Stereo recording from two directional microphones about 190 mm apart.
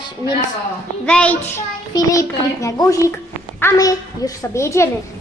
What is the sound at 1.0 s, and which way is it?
Speech, 5° left (ahead or behind).